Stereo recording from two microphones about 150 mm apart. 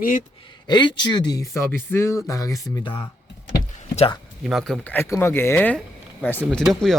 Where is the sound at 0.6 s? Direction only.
30° left (ahead or behind).